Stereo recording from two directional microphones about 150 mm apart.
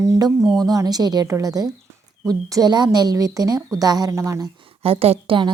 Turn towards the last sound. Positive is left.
turn(degrees=-35)  # may be behind; listen again after turning